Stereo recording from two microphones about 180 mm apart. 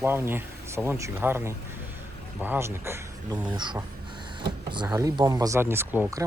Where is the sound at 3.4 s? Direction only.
25° right (ahead or behind).